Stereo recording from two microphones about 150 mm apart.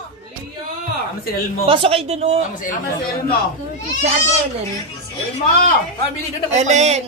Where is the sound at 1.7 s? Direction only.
40° right (ahead or behind).